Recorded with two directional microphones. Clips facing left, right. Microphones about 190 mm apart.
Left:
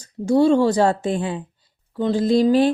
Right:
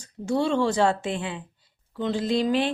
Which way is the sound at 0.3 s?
40° left (ahead or behind).